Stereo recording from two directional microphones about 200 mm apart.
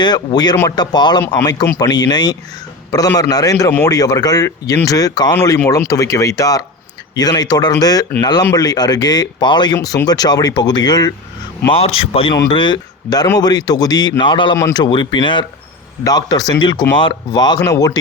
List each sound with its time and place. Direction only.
0.0 s a man's voice: 20° left (ahead or behind)